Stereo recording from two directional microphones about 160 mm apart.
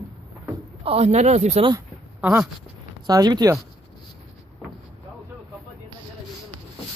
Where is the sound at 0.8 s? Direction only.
40° right (ahead or behind).